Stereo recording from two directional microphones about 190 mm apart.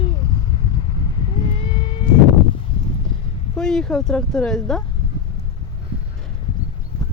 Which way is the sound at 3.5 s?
5° left (ahead or behind).